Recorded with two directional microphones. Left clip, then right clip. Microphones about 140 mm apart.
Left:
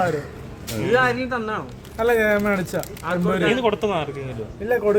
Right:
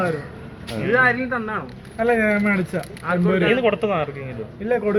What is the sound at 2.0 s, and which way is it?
Speech, 25° left (ahead or behind).